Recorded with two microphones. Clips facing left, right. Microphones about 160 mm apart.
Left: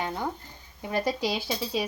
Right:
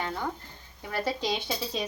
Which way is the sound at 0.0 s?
15° left (ahead or behind).